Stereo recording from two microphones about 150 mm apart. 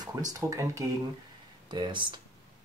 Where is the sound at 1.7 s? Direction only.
30° right (ahead or behind).